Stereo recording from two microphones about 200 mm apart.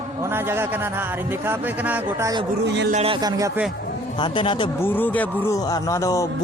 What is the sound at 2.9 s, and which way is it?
Speech, 30° right (ahead or behind).